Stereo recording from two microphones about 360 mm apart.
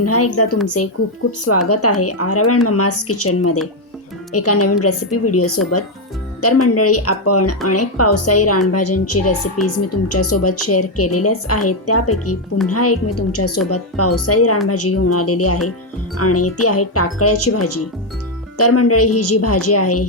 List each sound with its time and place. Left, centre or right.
0.0 s speech: left